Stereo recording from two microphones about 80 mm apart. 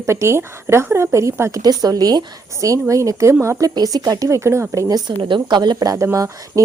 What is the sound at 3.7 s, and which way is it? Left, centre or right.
A woman's voice, right.